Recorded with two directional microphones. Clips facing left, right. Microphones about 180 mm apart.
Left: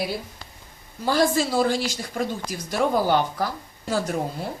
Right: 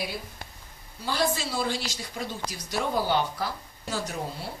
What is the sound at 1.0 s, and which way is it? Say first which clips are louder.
Speech: left 7 dB; 45° left (ahead or behind).